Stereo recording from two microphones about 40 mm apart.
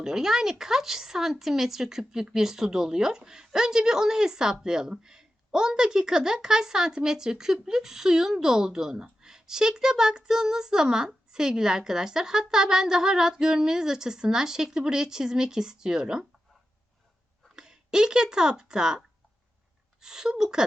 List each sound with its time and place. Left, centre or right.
0.0 s speech: centre
17.5 s speech: centre
20.0 s speech: centre